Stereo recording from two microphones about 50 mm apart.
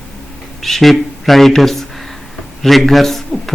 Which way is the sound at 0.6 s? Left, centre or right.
Centre.